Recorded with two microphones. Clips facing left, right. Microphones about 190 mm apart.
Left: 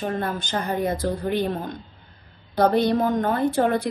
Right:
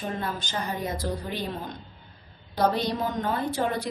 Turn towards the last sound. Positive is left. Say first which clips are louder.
# left 6 dB
turn(degrees=55)  # may be behind; listen again after turning